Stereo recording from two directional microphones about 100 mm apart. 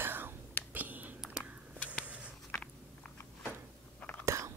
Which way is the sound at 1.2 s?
5° right (ahead or behind).